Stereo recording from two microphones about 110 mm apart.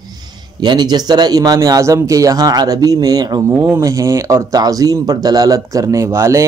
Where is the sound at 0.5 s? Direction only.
40° right (ahead or behind).